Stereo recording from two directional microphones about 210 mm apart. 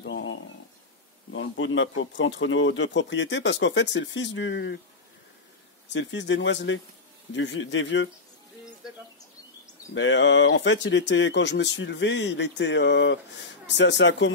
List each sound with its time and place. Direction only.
0.0 s a sound: 65° left (ahead or behind)
1.3 s speech: 65° left (ahead or behind)
5.9 s speech: 60° left (ahead or behind)
9.9 s speech: 60° left (ahead or behind)